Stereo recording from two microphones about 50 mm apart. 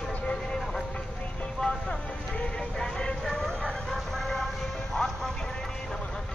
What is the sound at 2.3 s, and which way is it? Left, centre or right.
Vehicle, centre.